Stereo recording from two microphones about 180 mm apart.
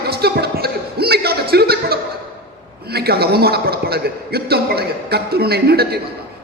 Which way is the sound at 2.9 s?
60° right (ahead or behind).